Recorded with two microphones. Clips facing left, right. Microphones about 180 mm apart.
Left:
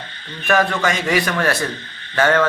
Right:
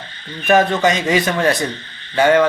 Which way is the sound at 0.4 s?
20° right (ahead or behind).